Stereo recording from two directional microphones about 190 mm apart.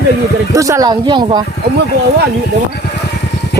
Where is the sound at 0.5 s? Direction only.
15° right (ahead or behind).